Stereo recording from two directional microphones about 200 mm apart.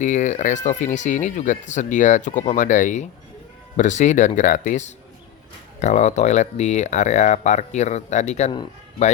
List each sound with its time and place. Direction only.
0.0 s speech: 40° left (ahead or behind)